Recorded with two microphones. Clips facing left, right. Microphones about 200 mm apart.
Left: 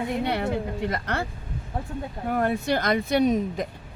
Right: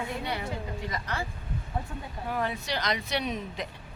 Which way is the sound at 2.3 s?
50° left (ahead or behind).